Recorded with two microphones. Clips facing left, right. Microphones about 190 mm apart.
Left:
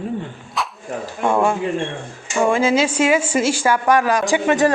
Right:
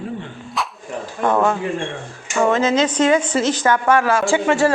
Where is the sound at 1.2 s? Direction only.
10° left (ahead or behind).